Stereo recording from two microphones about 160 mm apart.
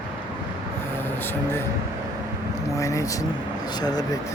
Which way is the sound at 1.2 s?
15° left (ahead or behind).